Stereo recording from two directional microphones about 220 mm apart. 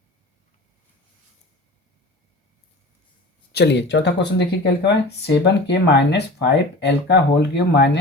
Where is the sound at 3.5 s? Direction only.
50° left (ahead or behind).